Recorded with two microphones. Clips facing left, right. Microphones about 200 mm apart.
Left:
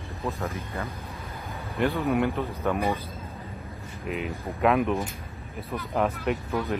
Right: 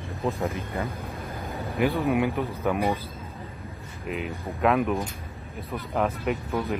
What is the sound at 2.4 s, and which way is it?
Speech, 15° right (ahead or behind).